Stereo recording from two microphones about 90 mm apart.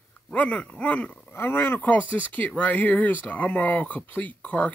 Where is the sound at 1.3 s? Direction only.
25° left (ahead or behind).